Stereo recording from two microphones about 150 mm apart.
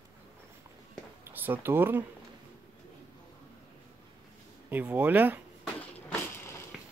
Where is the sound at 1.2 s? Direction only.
10° right (ahead or behind).